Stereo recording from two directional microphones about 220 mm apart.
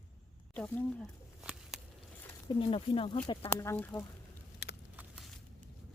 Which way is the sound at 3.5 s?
10° left (ahead or behind).